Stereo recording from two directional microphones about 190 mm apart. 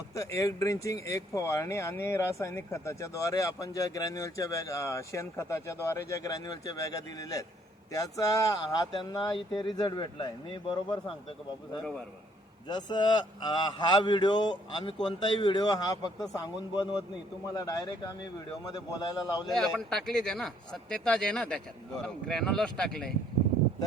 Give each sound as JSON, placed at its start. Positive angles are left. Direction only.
{"t": 0.1, "sound": "speech", "side_deg": 15}
{"t": 12.6, "sound": "speech", "side_deg": 20}
{"t": 19.5, "sound": "speech", "side_deg": 0}